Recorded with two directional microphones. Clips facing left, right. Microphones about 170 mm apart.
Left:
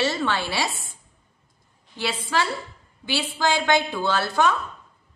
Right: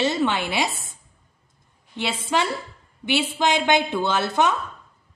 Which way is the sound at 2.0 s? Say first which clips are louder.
Right 1 dB; 20° right (ahead or behind).